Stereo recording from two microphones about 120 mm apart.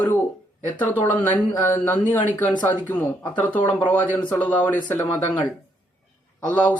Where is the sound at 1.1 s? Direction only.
15° left (ahead or behind).